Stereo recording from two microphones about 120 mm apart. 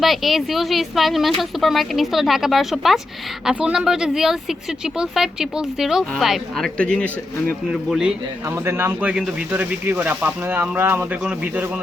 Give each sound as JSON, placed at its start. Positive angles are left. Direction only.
{"t": 0.0, "sound": "speech", "side_deg": 0}
{"t": 7.7, "sound": "speech", "side_deg": -5}
{"t": 8.6, "sound": "speech", "side_deg": -20}